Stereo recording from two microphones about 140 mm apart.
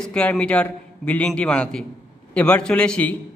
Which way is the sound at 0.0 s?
5° left (ahead or behind).